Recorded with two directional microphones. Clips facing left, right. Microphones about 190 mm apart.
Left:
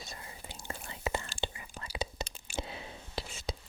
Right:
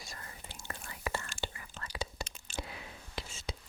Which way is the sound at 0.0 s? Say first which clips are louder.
Left 2 dB; 20° left (ahead or behind).